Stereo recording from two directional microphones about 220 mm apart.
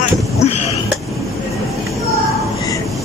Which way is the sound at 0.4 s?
30° left (ahead or behind).